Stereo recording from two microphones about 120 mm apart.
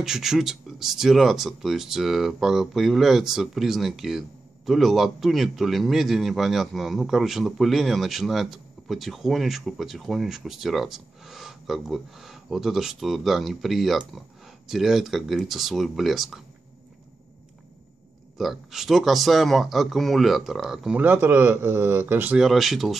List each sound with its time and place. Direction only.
0.0 s a man's voice: 5° right (ahead or behind)
18.4 s a man's voice: centre (ahead or behind)
21.0 s a man's voice: 20° right (ahead or behind)
22.5 s a man's voice: centre (ahead or behind)